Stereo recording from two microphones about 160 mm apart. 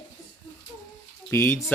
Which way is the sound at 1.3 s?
15° left (ahead or behind).